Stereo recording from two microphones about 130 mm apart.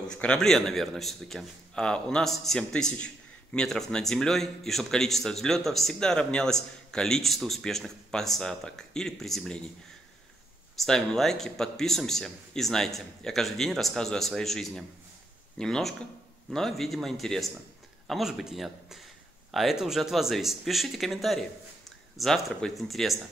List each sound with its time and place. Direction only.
0.1 s a man's voice: 5° left (ahead or behind)
10.8 s a man's voice: 5° left (ahead or behind)